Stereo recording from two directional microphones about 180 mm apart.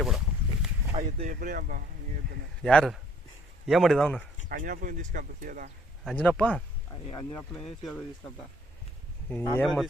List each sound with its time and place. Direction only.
1.0 s speech: 45° right (ahead or behind)
2.6 s speech: 5° left (ahead or behind)
4.4 s speech: 50° right (ahead or behind)
6.1 s speech: 5° left (ahead or behind)
7.1 s speech: 25° left (ahead or behind)
7.3 s speech: centre (ahead or behind)
9.3 s speech: 5° left (ahead or behind)